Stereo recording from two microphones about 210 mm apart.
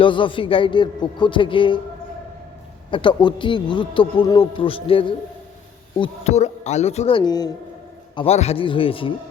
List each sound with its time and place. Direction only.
0.0 s speech: 25° left (ahead or behind)
2.9 s speech: 20° left (ahead or behind)